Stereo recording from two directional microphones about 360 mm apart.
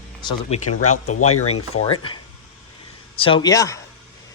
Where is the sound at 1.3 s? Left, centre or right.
Left.